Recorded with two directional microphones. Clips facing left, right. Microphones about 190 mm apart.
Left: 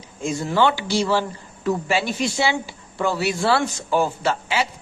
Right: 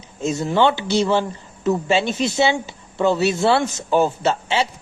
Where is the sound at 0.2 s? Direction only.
25° right (ahead or behind).